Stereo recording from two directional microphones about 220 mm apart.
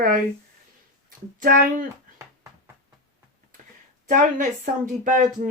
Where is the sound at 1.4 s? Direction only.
40° right (ahead or behind).